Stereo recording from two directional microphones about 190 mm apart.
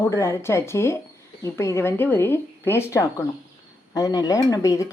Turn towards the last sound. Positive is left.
turn(degrees=15)  # may be behind; listen again after turning